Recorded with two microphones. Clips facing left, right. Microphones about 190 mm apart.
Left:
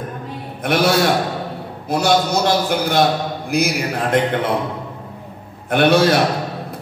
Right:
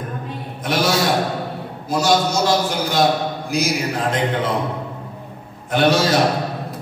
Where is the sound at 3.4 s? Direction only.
60° left (ahead or behind).